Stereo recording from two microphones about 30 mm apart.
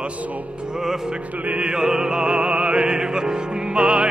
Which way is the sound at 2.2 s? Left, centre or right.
Right.